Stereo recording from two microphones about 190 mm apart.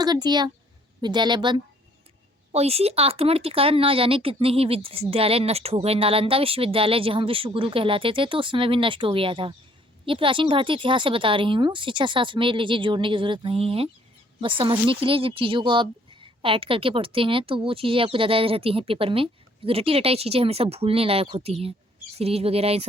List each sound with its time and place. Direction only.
0.0 s speech: 20° right (ahead or behind)